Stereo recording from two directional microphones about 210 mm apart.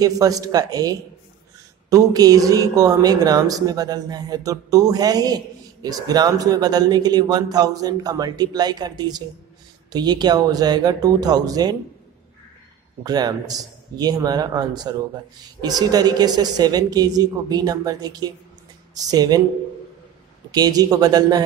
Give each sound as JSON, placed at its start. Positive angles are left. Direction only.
{"t": 0.0, "sound": "speech", "side_deg": -15}
{"t": 13.0, "sound": "speech", "side_deg": -20}
{"t": 20.5, "sound": "speech", "side_deg": -20}